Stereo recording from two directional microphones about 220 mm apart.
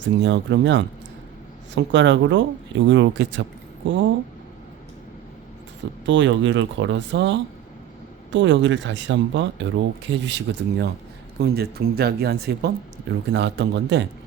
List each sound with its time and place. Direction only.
0.2 s speech: 55° right (ahead or behind)
6.1 s speech: 55° right (ahead or behind)